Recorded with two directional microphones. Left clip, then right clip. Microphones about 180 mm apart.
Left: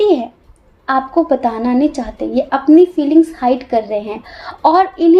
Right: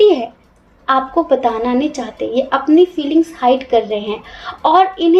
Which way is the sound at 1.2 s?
35° left (ahead or behind).